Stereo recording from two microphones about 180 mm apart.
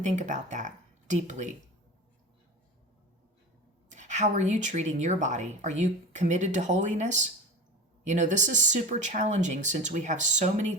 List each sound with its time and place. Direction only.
0.0 s speech: 40° right (ahead or behind)
3.8 s a woman's voice: 40° right (ahead or behind)